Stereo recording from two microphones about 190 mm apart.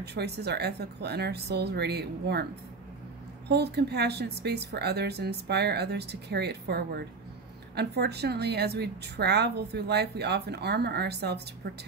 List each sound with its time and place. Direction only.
0.0 s a woman's voice: 60° right (ahead or behind)
3.4 s a woman's voice: 60° right (ahead or behind)